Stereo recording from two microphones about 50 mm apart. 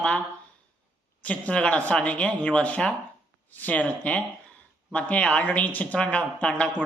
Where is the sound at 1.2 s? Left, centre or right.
Left.